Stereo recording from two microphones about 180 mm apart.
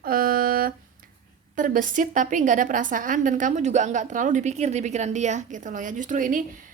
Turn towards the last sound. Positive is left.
turn(degrees=-45)  # may be behind; listen again after turning